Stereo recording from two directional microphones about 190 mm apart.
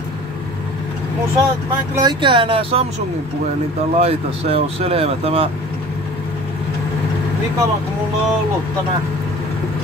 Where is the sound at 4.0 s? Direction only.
30° right (ahead or behind).